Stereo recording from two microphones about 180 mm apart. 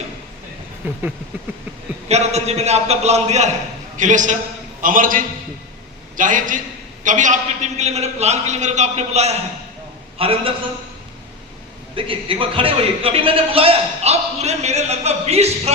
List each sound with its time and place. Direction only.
0.8 s a sound: 10° right (ahead or behind)
2.0 s a man's voice: 35° right (ahead or behind)
11.9 s a man's voice: 30° right (ahead or behind)